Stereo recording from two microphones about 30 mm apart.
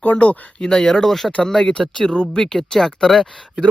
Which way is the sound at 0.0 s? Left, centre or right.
Left.